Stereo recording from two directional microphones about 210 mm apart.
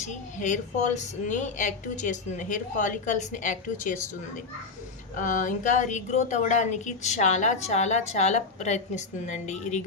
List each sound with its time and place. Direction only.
0.1 s a woman's voice: 35° left (ahead or behind)
5.1 s a woman's voice: 35° left (ahead or behind)